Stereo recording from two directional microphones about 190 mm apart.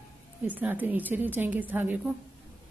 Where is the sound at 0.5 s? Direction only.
10° right (ahead or behind).